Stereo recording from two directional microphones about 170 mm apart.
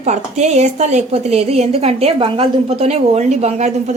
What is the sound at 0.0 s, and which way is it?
A woman's voice, 40° right (ahead or behind).